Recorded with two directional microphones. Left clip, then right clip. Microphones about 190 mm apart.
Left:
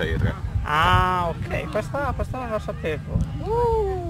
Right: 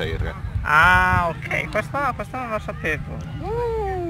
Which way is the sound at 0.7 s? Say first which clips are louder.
Right 4 dB; 20° left (ahead or behind).